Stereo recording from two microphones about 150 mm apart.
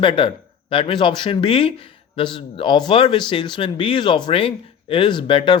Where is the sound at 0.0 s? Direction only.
35° left (ahead or behind).